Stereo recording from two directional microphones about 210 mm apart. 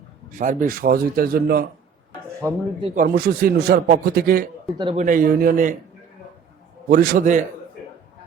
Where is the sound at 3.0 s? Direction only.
45° right (ahead or behind).